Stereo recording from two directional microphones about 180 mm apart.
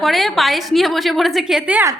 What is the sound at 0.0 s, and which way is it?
A woman's voice, centre (ahead or behind).